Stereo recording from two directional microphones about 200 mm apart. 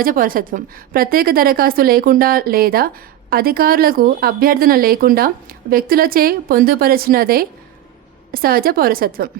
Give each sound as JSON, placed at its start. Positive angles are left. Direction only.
{"t": 0.0, "sound": "a woman's voice", "side_deg": -45}